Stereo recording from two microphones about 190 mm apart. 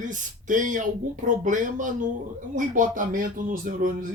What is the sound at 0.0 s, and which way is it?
Speech, 40° right (ahead or behind).